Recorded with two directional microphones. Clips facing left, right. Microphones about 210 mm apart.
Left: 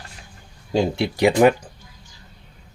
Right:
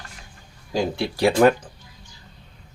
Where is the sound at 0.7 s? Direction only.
25° left (ahead or behind).